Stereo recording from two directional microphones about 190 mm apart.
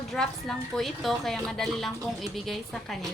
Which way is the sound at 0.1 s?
Centre (ahead or behind).